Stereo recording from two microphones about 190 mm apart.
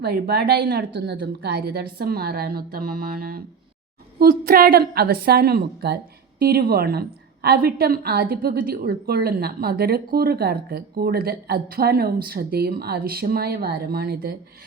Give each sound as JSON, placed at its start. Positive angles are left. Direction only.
{"t": 0.0, "sound": "a woman's voice", "side_deg": -55}